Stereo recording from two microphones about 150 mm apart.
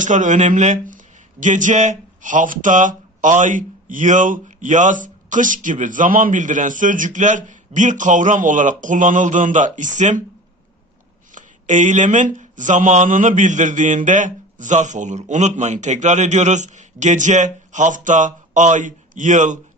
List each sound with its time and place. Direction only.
0.0 s speech: 55° right (ahead or behind)
11.3 s speech: 55° right (ahead or behind)